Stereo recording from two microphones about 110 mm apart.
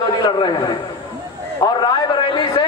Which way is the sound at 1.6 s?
45° left (ahead or behind).